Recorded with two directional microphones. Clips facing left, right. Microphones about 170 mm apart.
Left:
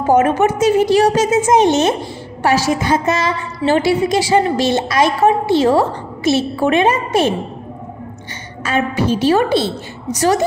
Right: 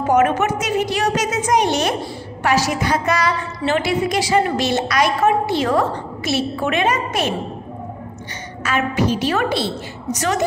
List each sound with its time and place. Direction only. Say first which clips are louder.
0.0 s a woman's voice: left 3 dB; 30° left (ahead or behind)
8.6 s a woman's voice: left 2 dB; 30° left (ahead or behind)